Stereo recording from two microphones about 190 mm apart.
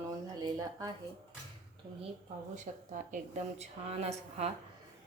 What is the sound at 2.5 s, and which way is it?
A woman's voice, 40° right (ahead or behind).